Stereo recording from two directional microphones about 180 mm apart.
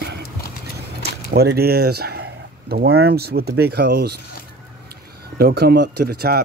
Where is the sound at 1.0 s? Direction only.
65° right (ahead or behind).